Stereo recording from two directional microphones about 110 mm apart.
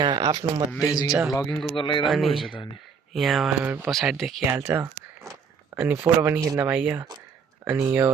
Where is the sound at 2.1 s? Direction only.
Centre (ahead or behind).